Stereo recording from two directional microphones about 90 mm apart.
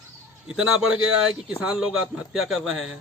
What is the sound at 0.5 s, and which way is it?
Speech, 5° right (ahead or behind).